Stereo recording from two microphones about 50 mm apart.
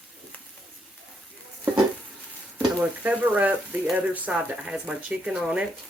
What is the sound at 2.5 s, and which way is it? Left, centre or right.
Speech, right.